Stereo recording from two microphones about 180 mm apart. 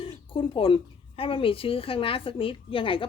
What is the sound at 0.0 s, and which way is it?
Speech, 30° left (ahead or behind).